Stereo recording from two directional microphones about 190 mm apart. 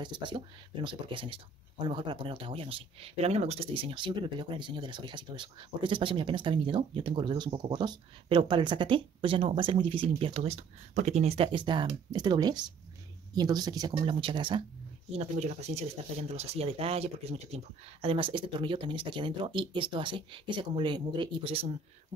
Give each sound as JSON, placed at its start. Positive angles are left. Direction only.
{"t": 0.0, "sound": "speech", "side_deg": -25}
{"t": 15.0, "sound": "speech", "side_deg": -35}